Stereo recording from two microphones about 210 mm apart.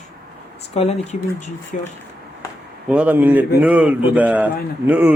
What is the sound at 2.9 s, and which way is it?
Speech, 5° right (ahead or behind).